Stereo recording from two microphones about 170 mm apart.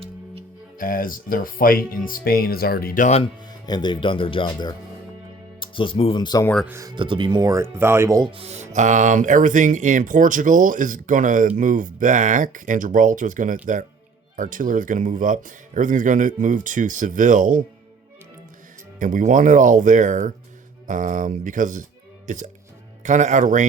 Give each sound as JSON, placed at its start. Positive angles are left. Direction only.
{"t": 0.8, "sound": "speech", "side_deg": 55}
{"t": 3.7, "sound": "speech", "side_deg": 25}
{"t": 6.7, "sound": "speech", "side_deg": -20}
{"t": 8.2, "sound": "speech", "side_deg": -35}
{"t": 18.9, "sound": "speech", "side_deg": -50}